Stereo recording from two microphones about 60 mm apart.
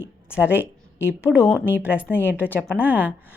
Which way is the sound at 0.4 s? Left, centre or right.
Left.